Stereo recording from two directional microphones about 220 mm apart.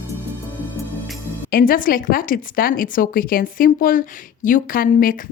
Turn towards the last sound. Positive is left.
turn(degrees=40)  # may be behind; listen again after turning